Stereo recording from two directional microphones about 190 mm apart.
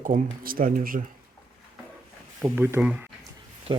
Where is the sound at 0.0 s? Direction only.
45° right (ahead or behind).